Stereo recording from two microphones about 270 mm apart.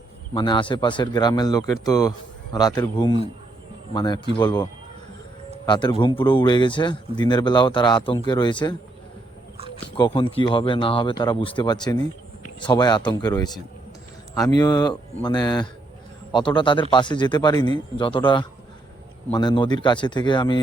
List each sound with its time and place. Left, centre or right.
0.3 s speech: centre
10.0 s speech: centre